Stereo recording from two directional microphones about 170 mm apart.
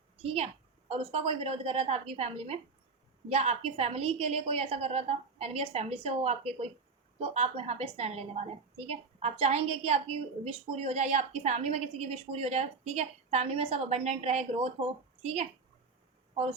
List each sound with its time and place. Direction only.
0.2 s a woman's voice: 35° right (ahead or behind)